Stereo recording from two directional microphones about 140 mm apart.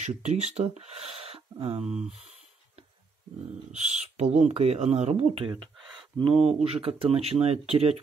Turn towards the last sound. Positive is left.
turn(degrees=-45)  # may be behind; listen again after turning